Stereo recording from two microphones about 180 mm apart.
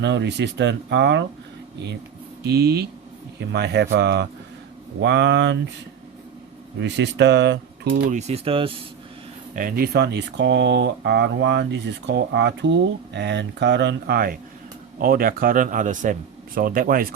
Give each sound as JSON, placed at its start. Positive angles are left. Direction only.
{"t": 0.0, "sound": "speech", "side_deg": -75}
{"t": 2.4, "sound": "speech", "side_deg": -65}
{"t": 6.7, "sound": "speech", "side_deg": -75}
{"t": 8.1, "sound": "speech", "side_deg": -35}
{"t": 9.6, "sound": "a man's voice", "side_deg": -55}